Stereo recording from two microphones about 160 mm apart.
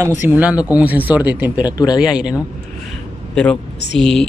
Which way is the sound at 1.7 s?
25° left (ahead or behind).